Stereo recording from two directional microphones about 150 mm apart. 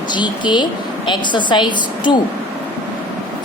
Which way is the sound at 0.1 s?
30° left (ahead or behind).